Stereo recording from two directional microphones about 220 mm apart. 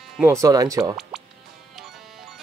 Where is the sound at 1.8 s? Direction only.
Centre (ahead or behind).